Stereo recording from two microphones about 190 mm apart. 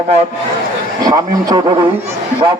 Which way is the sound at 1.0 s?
20° right (ahead or behind).